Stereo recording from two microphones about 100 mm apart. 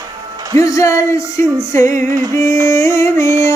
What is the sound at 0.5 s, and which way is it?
Music, 35° left (ahead or behind).